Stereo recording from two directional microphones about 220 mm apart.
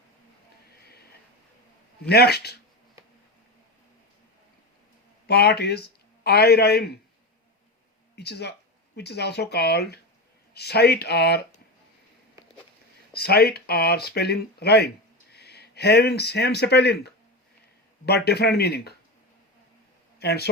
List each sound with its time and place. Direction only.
2.0 s speech: 45° left (ahead or behind)
5.2 s speech: 45° left (ahead or behind)
8.1 s speech: 50° left (ahead or behind)
13.1 s speech: 45° left (ahead or behind)
20.1 s speech: 45° left (ahead or behind)